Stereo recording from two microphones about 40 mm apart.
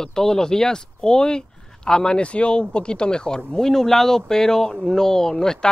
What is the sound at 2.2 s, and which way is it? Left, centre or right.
Speech, left.